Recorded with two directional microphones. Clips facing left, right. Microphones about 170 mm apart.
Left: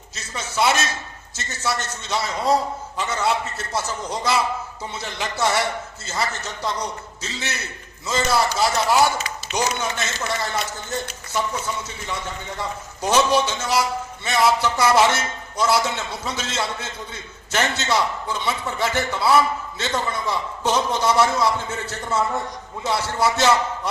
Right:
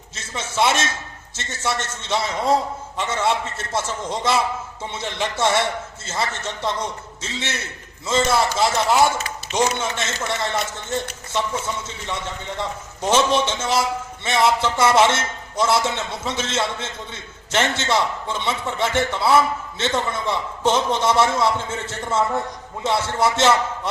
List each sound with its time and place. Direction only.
0.3 s a man's voice: 25° right (ahead or behind)
12.5 s a man's voice: 25° right (ahead or behind)